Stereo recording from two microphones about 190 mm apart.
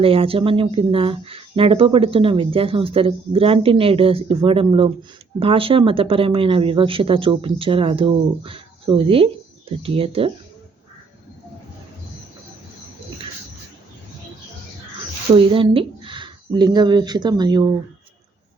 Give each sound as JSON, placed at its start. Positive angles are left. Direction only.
{"t": 0.0, "sound": "speech", "side_deg": -30}
{"t": 15.4, "sound": "speech", "side_deg": -25}